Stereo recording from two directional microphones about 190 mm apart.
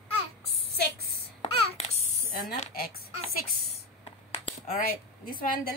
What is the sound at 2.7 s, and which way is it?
Speech, 55° left (ahead or behind).